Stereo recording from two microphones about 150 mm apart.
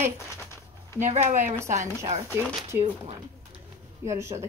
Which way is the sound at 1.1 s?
50° right (ahead or behind).